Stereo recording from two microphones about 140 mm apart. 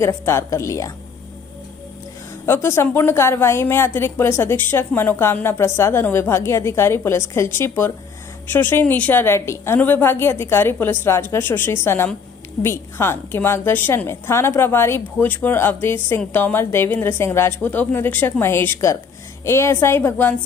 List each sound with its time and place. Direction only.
0.0 s a woman's voice: 15° left (ahead or behind)
2.4 s a woman's voice: 15° left (ahead or behind)